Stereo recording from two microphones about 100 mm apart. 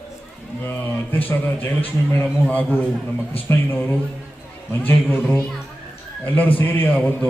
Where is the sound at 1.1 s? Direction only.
20° left (ahead or behind).